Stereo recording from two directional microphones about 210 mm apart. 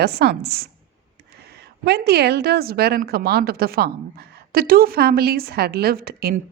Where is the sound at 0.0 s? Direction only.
50° right (ahead or behind).